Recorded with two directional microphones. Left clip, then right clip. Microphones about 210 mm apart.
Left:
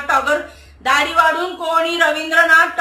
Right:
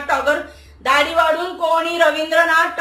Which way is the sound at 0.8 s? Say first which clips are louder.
Even; 15° left (ahead or behind).